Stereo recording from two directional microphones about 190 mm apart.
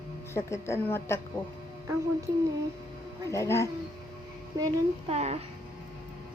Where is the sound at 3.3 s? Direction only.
15° left (ahead or behind).